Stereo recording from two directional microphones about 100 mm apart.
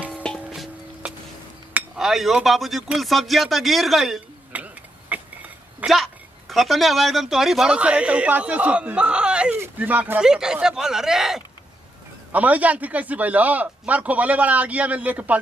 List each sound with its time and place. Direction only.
0.1 s music: 10° left (ahead or behind)
2.0 s speech: centre (ahead or behind)
4.5 s clock: 15° right (ahead or behind)
5.1 s a sound: 15° right (ahead or behind)
5.8 s a man's voice: 15° right (ahead or behind)
6.5 s a man's voice: centre (ahead or behind)
12.3 s a man's voice: 15° right (ahead or behind)